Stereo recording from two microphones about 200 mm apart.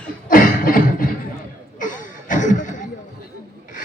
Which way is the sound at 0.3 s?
45° left (ahead or behind).